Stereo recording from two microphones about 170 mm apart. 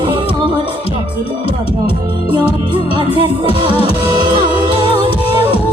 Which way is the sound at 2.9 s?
30° right (ahead or behind).